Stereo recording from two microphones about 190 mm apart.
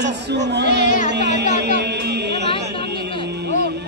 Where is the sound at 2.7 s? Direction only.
60° right (ahead or behind).